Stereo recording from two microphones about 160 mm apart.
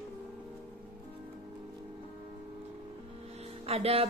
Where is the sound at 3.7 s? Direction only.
40° right (ahead or behind).